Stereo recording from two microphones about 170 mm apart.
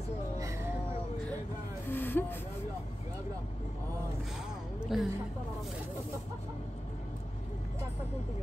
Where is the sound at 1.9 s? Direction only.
10° left (ahead or behind).